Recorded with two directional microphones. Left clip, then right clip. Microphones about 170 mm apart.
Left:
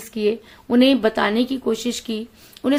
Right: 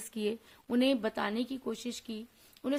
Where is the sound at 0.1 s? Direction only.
50° right (ahead or behind).